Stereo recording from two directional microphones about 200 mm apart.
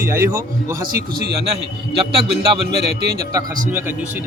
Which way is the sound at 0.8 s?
50° right (ahead or behind).